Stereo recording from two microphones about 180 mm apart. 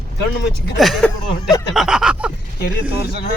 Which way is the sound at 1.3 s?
20° left (ahead or behind).